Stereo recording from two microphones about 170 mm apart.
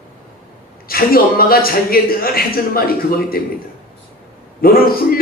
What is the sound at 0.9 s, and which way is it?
Speech, 60° left (ahead or behind).